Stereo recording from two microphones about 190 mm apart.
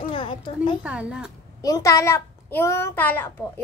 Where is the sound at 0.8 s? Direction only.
5° right (ahead or behind).